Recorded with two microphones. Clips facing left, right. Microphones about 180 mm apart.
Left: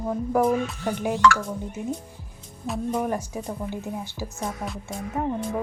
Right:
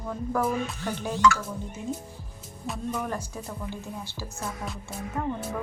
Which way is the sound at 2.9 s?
20° left (ahead or behind).